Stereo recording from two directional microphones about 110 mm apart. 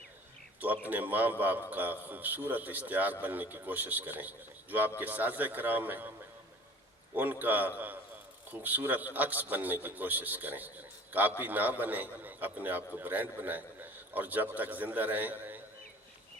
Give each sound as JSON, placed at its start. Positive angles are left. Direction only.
{"t": 0.6, "sound": "a man's voice", "side_deg": -15}